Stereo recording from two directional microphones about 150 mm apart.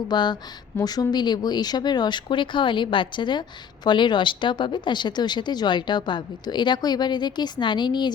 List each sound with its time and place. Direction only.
0.1 s speech: 30° left (ahead or behind)